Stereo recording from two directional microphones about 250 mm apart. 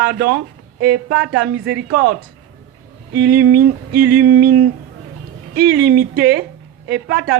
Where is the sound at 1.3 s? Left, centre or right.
Right.